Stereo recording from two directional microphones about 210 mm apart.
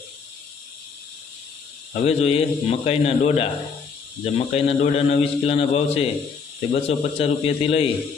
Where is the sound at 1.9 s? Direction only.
30° left (ahead or behind).